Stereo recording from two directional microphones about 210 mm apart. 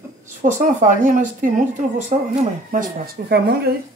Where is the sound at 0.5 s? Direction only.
35° right (ahead or behind); by 3.7 s 50° right (ahead or behind).